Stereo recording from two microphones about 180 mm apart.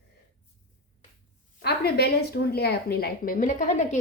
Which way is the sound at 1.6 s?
60° left (ahead or behind).